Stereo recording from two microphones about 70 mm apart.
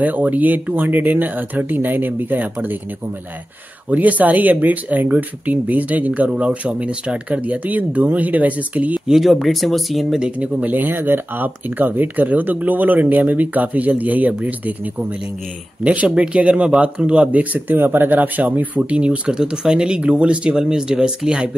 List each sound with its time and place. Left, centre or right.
0.0 s speech: right
3.9 s speech: right
9.0 s speech: centre
10.4 s speech: right
15.8 s speech: centre